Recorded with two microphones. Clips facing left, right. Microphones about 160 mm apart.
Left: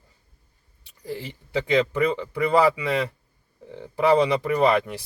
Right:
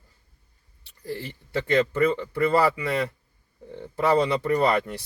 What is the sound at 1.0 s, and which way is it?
Speech, 15° left (ahead or behind).